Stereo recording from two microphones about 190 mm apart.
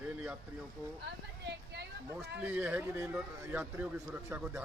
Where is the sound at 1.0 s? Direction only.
60° right (ahead or behind).